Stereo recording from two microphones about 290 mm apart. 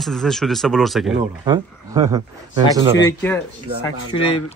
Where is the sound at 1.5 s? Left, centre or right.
Centre.